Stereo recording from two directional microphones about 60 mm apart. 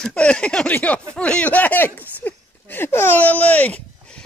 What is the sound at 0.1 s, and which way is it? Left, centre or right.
Speech, centre.